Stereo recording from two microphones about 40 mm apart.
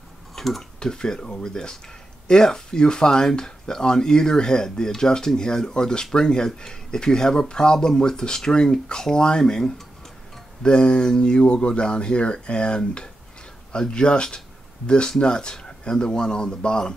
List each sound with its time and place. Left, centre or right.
0.4 s speech: centre
0.7 s speech: centre